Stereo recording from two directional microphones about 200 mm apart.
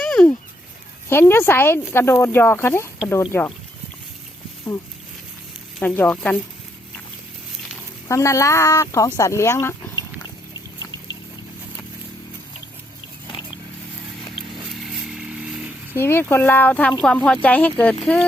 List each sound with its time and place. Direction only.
0.0 s fowl: 5° left (ahead or behind)
1.1 s speech: 10° left (ahead or behind)
5.8 s speech: 10° left (ahead or behind)
8.0 s speech: 15° left (ahead or behind)
14.7 s vehicle: 5° right (ahead or behind)
16.0 s speech: 10° left (ahead or behind)